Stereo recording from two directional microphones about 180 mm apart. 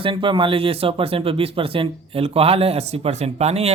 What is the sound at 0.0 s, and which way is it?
Speech, 25° right (ahead or behind).